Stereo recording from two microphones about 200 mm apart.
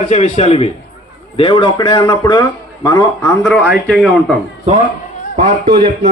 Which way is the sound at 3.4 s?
5° left (ahead or behind).